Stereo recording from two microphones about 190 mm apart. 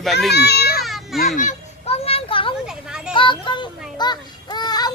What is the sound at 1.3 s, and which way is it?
Children playing, 35° left (ahead or behind).